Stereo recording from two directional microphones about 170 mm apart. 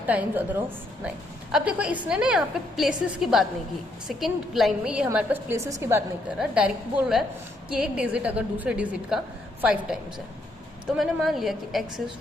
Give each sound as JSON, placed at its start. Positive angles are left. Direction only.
{"t": 0.0, "sound": "a woman's voice", "side_deg": -10}
{"t": 1.5, "sound": "a woman's voice", "side_deg": -5}
{"t": 6.4, "sound": "a woman's voice", "side_deg": -5}